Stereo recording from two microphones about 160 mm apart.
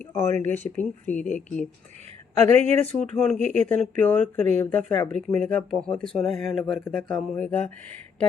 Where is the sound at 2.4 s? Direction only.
45° right (ahead or behind).